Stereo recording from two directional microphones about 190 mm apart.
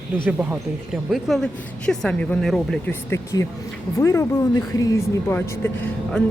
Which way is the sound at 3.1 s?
15° left (ahead or behind).